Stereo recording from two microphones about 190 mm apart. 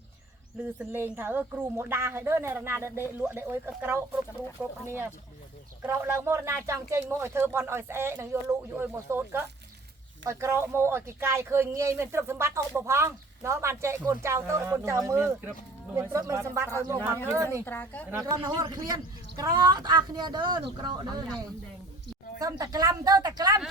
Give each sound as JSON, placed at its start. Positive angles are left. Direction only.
{"t": 0.8, "sound": "speech", "side_deg": -10}
{"t": 17.7, "sound": "a woman's voice", "side_deg": 10}
{"t": 18.1, "sound": "speech", "side_deg": -20}
{"t": 22.4, "sound": "speech", "side_deg": -20}